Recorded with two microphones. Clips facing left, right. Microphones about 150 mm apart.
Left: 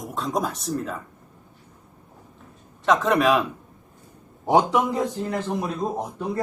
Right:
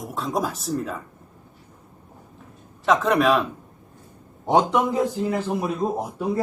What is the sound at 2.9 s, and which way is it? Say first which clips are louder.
A man's voice: even; centre (ahead or behind).